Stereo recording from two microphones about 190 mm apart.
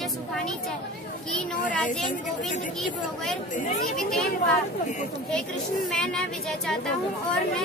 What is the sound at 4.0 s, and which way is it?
Speech, centre (ahead or behind).